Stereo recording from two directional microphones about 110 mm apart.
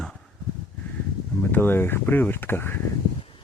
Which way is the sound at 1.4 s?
15° left (ahead or behind).